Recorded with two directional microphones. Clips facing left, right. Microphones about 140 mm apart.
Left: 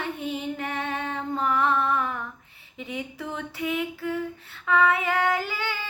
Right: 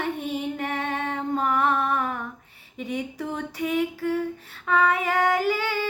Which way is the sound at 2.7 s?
40° right (ahead or behind).